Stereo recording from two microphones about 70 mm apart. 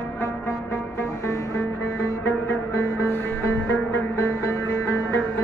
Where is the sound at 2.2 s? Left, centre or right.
Left.